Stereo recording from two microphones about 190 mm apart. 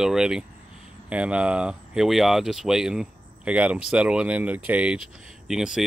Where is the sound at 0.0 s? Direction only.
5° right (ahead or behind).